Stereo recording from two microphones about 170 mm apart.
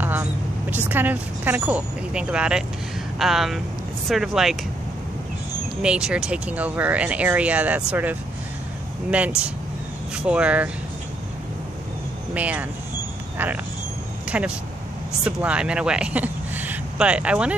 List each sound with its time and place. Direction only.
0.0 s speech: 10° right (ahead or behind)
5.8 s speech: 5° right (ahead or behind)
12.4 s speech: 10° right (ahead or behind)
14.2 s a sound: 5° right (ahead or behind)
15.2 s speech: 5° right (ahead or behind)